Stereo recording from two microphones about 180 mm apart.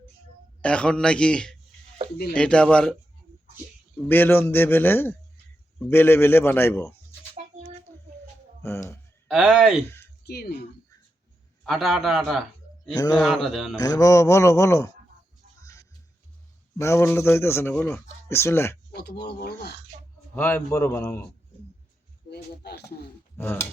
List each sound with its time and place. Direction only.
0.6 s a man's voice: 5° left (ahead or behind)
4.1 s speech: 10° left (ahead or behind)
9.2 s a man's voice: centre (ahead or behind)
10.2 s speech: 60° left (ahead or behind)
11.6 s a man's voice: centre (ahead or behind)
13.0 s a man's voice: 20° left (ahead or behind)
13.2 s a man's voice: centre (ahead or behind)
13.7 s speech: 20° left (ahead or behind)
16.7 s speech: 15° left (ahead or behind)
18.9 s speech: 60° left (ahead or behind)
20.3 s speech: 10° left (ahead or behind)
22.3 s speech: 65° left (ahead or behind)
23.4 s speech: 10° left (ahead or behind)